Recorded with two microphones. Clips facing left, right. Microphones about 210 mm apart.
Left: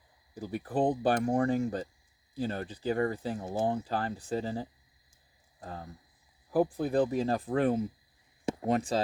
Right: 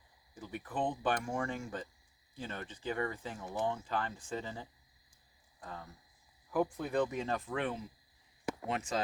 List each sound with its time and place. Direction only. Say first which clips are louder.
0.3 s speech: left 8 dB; 40° left (ahead or behind)